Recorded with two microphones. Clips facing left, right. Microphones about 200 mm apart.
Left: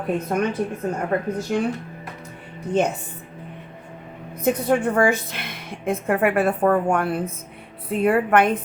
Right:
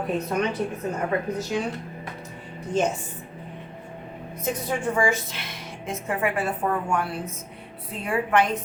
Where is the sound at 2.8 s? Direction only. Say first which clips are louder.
Left 3 dB; 60° left (ahead or behind).